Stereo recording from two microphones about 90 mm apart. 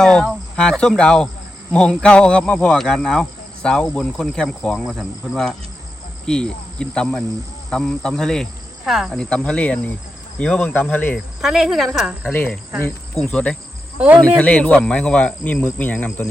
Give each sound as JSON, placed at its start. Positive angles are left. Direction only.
{"t": 0.0, "sound": "speech", "side_deg": 10}
{"t": 4.8, "sound": "a woman's voice", "side_deg": -5}
{"t": 9.1, "sound": "speech", "side_deg": 10}
{"t": 11.3, "sound": "a woman's voice", "side_deg": -5}
{"t": 13.3, "sound": "speech", "side_deg": 15}